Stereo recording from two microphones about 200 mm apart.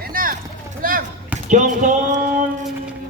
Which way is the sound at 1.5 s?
40° right (ahead or behind).